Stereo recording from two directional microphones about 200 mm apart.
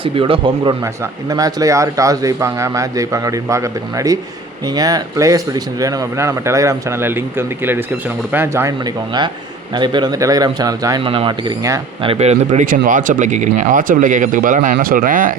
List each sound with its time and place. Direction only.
0.0 s speech: 25° right (ahead or behind)
9.7 s speech: 20° right (ahead or behind)
12.0 s speech: 30° right (ahead or behind)